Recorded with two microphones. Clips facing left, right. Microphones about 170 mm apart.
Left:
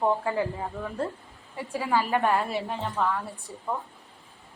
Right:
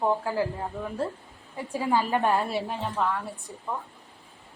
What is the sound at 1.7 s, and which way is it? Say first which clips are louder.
Speech: right 1 dB; 15° right (ahead or behind).